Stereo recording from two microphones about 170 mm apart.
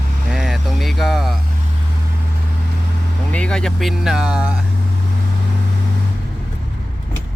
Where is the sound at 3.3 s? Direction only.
5° left (ahead or behind).